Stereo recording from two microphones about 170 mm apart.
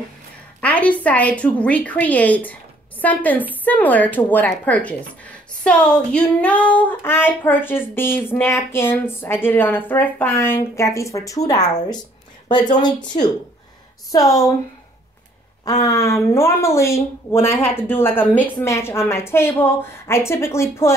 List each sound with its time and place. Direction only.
0.6 s a woman's voice: 10° left (ahead or behind)
15.8 s speech: 15° left (ahead or behind)